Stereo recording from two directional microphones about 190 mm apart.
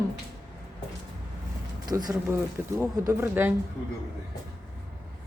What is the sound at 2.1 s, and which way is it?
A woman's voice, 10° right (ahead or behind).